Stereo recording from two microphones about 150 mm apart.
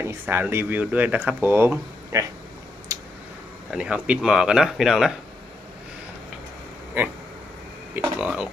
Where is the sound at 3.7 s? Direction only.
5° right (ahead or behind).